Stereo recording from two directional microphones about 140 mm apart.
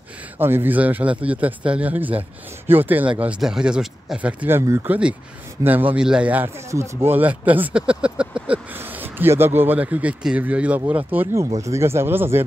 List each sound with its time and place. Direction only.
0.4 s a man's voice: 15° right (ahead or behind)